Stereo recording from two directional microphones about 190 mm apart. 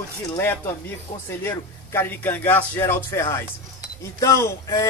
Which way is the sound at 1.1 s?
40° left (ahead or behind).